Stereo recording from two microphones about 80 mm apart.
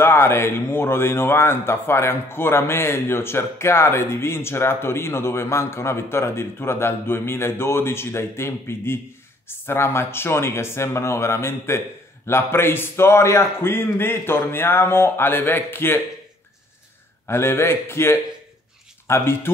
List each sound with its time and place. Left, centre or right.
0.0 s a man's voice: left
17.3 s speech: left